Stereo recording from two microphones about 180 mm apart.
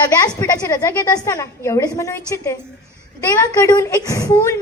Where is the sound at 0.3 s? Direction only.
20° left (ahead or behind).